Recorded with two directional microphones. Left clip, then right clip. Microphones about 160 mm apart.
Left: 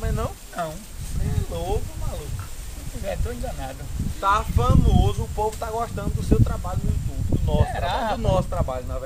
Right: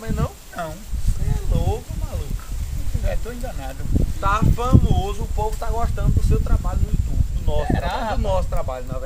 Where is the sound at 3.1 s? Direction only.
25° left (ahead or behind).